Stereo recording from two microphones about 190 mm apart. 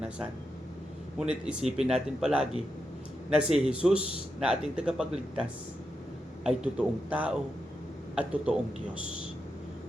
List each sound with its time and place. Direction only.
1.2 s speech: 5° right (ahead or behind)